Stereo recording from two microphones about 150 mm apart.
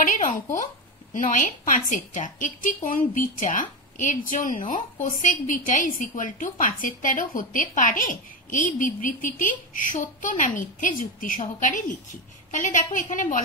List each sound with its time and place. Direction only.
0.0 s a woman's voice: 55° left (ahead or behind)